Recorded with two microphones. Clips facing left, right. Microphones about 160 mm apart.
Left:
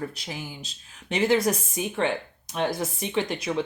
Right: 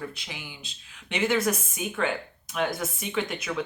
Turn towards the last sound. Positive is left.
turn(degrees=30)  # may be behind; listen again after turning